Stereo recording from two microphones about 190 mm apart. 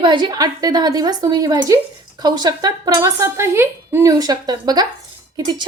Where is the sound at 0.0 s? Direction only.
25° right (ahead or behind).